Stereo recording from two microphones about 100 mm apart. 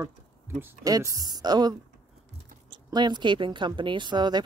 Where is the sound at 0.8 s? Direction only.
35° right (ahead or behind).